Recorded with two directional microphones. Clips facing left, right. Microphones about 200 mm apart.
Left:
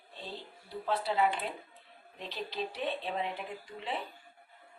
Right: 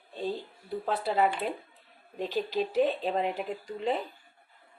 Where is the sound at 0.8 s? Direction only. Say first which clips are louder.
Right 3 dB; 50° right (ahead or behind).